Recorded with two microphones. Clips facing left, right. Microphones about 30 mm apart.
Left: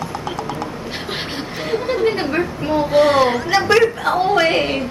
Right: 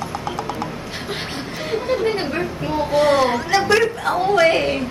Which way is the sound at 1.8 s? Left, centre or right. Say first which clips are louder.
Left 2 dB; centre.